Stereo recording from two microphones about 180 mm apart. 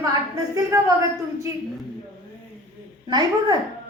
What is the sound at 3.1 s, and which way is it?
Speech, 25° right (ahead or behind).